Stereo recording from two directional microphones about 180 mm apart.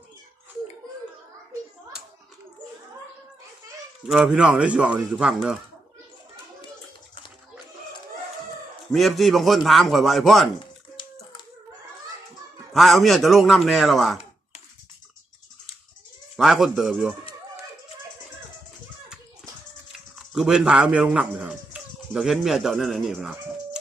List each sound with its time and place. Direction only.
4.0 s speech: 5° right (ahead or behind)
8.9 s speech: centre (ahead or behind)
10.9 s hands: 25° left (ahead or behind)
12.7 s speech: centre (ahead or behind)
16.4 s speech: centre (ahead or behind)
20.1 s a man's voice: 5° right (ahead or behind)